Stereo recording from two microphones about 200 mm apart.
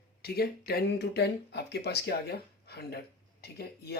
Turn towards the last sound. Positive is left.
turn(degrees=55)  # may be behind; listen again after turning